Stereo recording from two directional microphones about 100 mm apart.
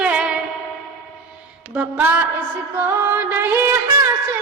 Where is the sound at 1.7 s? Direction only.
20° right (ahead or behind).